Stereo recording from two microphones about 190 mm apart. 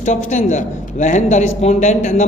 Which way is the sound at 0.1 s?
40° left (ahead or behind).